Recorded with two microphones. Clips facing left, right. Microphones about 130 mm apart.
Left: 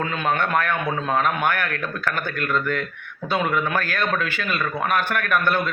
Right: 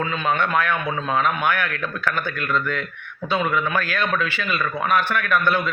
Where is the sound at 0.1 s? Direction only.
45° left (ahead or behind).